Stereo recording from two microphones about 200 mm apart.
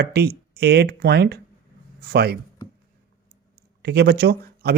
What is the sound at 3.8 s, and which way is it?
Speech, 55° right (ahead or behind).